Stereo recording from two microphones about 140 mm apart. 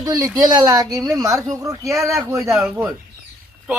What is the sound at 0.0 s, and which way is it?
Speech, 25° right (ahead or behind).